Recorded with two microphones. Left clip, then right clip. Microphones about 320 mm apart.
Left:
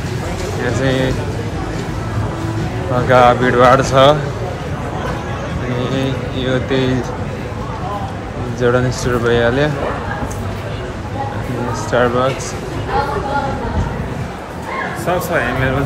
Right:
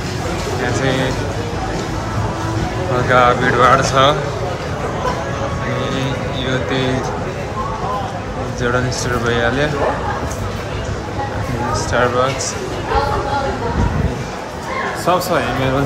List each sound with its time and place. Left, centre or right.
0.8 s speech: centre
3.1 s speech: centre
5.9 s speech: centre
8.5 s speech: centre
11.9 s speech: centre
15.0 s speech: centre